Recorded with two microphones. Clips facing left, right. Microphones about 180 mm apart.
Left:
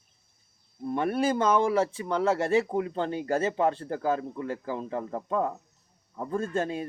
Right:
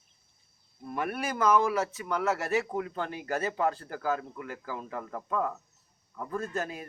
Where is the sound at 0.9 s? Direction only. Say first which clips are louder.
Left 7 dB; 30° left (ahead or behind).